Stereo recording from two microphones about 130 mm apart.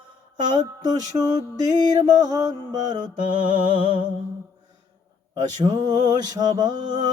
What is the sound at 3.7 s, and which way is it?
Music, 90° right.